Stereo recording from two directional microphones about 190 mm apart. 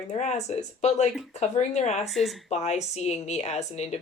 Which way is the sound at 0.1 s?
35° left (ahead or behind).